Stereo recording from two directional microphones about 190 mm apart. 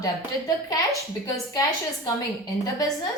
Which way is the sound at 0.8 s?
15° left (ahead or behind).